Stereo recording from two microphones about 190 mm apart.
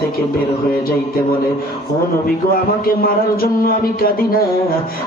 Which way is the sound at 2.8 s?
50° left (ahead or behind).